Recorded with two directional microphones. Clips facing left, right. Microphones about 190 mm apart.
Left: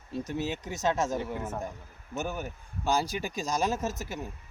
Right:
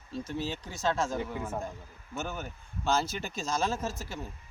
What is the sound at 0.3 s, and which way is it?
Speech, 20° left (ahead or behind).